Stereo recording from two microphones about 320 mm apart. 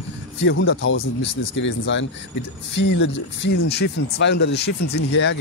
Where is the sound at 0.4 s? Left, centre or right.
Left.